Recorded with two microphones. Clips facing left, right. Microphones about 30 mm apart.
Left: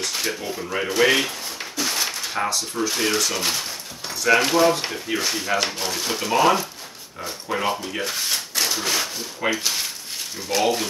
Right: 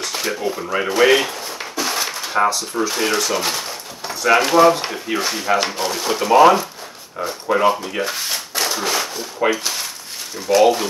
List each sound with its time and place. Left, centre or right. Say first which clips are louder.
0.0 s speech: right 4 dB; centre
0.6 s a sound: right 3 dB; right
2.5 s speech: right 3 dB; centre
7.7 s speech: right 4 dB; centre